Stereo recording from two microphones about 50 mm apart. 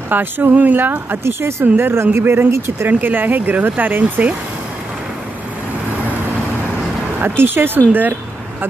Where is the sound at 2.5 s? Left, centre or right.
Right.